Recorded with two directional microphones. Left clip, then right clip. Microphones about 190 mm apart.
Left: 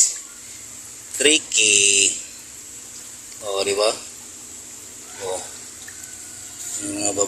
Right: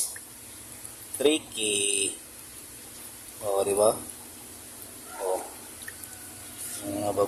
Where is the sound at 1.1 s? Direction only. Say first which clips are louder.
Left 8 dB; 5° right (ahead or behind).